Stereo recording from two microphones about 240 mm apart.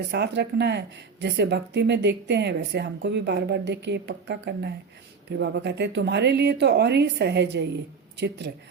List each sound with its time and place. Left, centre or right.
0.1 s a woman's voice: right